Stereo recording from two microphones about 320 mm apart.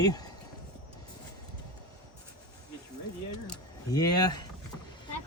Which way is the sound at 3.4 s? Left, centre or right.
Centre.